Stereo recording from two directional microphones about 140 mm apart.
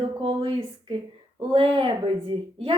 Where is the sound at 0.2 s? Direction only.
40° right (ahead or behind).